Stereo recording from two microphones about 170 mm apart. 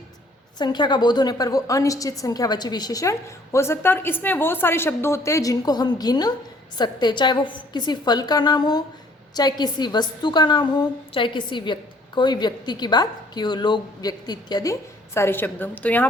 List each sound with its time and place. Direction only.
0.6 s a woman's voice: 25° left (ahead or behind); by 16.0 s 10° left (ahead or behind)